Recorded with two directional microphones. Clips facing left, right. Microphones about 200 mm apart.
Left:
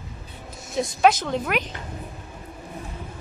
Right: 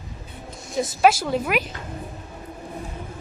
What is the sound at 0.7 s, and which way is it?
Speech, 5° right (ahead or behind).